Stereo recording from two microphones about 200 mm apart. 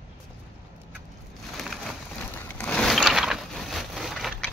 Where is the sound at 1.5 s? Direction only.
Centre (ahead or behind).